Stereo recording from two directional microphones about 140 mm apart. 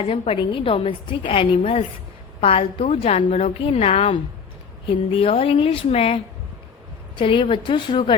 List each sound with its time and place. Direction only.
0.0 s a woman's voice: 45° left (ahead or behind)
3.2 s a woman's voice: 65° left (ahead or behind)
3.4 s a woman's voice: 45° left (ahead or behind)